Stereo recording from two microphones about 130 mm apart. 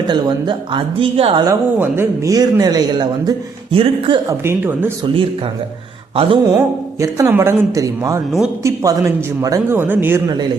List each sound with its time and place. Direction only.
0.1 s a woman's voice: 35° right (ahead or behind)
1.8 s a man's voice: 20° right (ahead or behind)
3.8 s a woman's voice: 40° right (ahead or behind)
4.3 s speech: 20° right (ahead or behind)
6.1 s a woman's voice: 40° right (ahead or behind)
6.6 s a man's voice: 25° right (ahead or behind)